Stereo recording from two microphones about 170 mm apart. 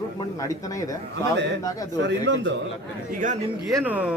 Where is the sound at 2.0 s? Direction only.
90° right.